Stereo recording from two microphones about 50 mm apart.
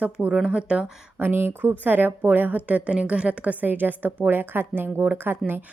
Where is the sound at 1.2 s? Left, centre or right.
Right.